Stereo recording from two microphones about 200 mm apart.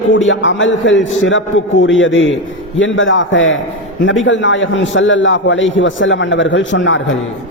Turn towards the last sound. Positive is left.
turn(degrees=70)  # may be behind; listen again after turning